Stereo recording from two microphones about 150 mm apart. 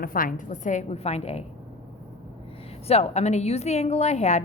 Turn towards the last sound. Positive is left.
turn(degrees=50)  # may be behind; listen again after turning